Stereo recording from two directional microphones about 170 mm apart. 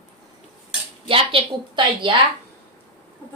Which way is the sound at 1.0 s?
30° right (ahead or behind).